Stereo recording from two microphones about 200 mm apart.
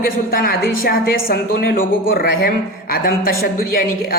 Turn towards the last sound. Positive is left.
turn(degrees=50)  # may be behind; listen again after turning